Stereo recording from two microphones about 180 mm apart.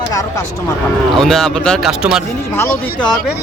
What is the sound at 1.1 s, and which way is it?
Speech, centre (ahead or behind).